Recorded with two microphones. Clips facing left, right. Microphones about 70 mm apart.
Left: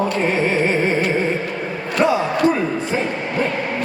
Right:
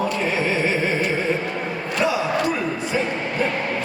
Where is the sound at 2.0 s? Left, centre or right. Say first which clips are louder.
Left 5 dB; left.